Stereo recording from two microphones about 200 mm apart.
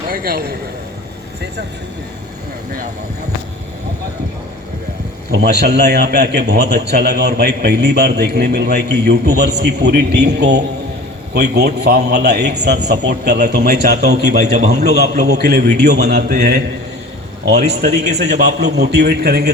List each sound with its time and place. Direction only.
0.1 s a man's voice: 45° right (ahead or behind)
5.3 s a man's voice: 55° right (ahead or behind)
14.4 s a man's voice: 35° right (ahead or behind)
14.7 s a man's voice: 55° right (ahead or behind)